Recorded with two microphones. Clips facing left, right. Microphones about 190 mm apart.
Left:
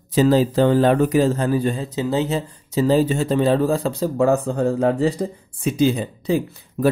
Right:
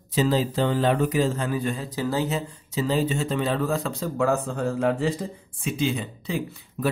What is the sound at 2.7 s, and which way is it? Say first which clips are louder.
A man's voice: left 7 dB; 40° left (ahead or behind).